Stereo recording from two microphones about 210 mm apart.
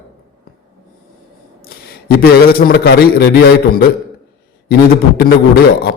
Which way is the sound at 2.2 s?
45° left (ahead or behind).